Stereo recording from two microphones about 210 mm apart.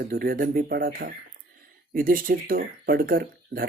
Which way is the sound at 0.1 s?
45° right (ahead or behind).